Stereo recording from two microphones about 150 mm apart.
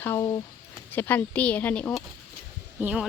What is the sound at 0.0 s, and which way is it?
Speech, 20° left (ahead or behind).